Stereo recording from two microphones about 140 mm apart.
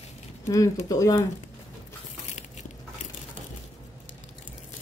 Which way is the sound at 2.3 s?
60° left (ahead or behind).